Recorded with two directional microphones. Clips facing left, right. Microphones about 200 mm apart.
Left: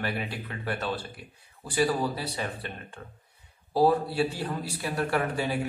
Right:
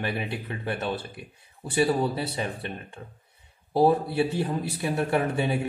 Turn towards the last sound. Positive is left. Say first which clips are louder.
# right 3 dB
turn(degrees=-20)  # may be behind; listen again after turning